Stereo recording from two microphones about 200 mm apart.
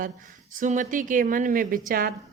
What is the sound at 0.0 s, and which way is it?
A woman's voice, 40° right (ahead or behind).